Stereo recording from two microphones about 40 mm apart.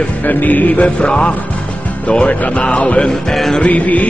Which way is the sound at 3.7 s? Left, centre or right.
Left.